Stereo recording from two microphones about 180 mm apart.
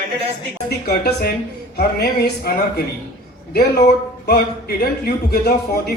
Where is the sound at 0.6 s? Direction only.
60° left (ahead or behind).